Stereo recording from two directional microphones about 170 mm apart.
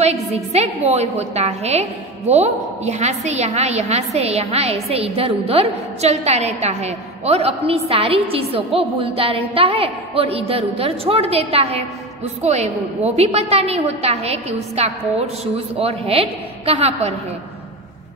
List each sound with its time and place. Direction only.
0.0 s a woman's voice: 40° right (ahead or behind)